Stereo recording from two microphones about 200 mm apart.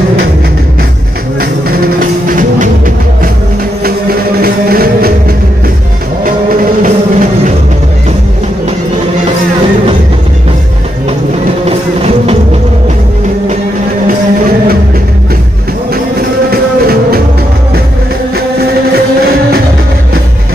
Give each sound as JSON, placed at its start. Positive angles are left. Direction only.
{"t": 1.4, "sound": "music", "side_deg": -45}
{"t": 3.8, "sound": "music", "side_deg": -50}
{"t": 6.2, "sound": "music", "side_deg": -45}
{"t": 11.6, "sound": "music", "side_deg": -30}
{"t": 15.9, "sound": "music", "side_deg": -50}
{"t": 18.9, "sound": "music", "side_deg": -50}